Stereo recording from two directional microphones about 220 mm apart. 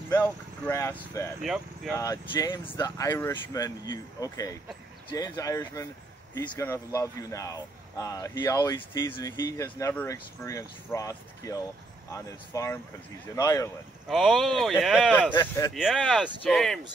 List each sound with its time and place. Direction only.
0.1 s speech: 10° left (ahead or behind)
1.4 s speech: centre (ahead or behind)
2.0 s speech: 15° left (ahead or behind)
14.0 s speech: centre (ahead or behind)
15.3 s speech: 15° left (ahead or behind)
15.7 s speech: centre (ahead or behind)